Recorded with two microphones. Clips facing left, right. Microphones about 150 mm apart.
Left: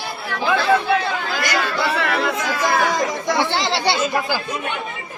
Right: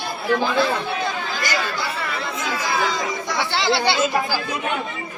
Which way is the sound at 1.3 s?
75° left (ahead or behind).